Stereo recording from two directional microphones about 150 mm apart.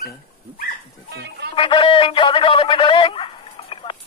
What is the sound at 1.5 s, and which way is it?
A man's voice, 35° left (ahead or behind).